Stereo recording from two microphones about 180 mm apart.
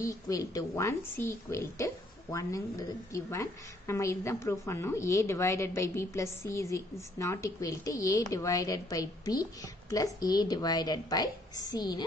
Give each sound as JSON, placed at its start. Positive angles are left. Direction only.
{"t": 0.0, "sound": "a woman's voice", "side_deg": 20}
{"t": 3.1, "sound": "a woman's voice", "side_deg": 15}